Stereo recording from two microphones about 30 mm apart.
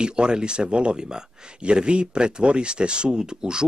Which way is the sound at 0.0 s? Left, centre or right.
Right.